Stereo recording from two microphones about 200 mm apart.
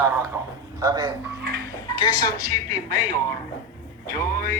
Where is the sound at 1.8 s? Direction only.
20° left (ahead or behind).